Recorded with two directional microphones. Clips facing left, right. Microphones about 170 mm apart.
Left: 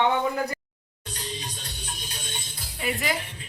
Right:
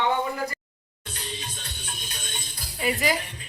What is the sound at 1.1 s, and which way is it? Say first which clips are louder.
Music: left 1 dB; 35° left (ahead or behind).